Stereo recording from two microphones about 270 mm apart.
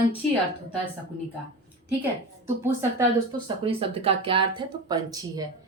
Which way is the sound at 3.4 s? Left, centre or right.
Centre.